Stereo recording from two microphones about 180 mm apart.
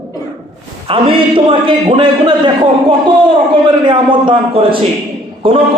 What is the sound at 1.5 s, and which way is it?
Speech, 30° right (ahead or behind).